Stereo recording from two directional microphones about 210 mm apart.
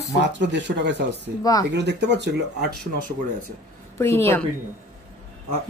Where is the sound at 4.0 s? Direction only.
10° left (ahead or behind).